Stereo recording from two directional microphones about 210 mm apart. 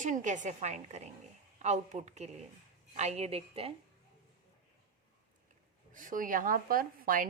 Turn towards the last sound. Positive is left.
turn(degrees=-40)  # may be behind; listen again after turning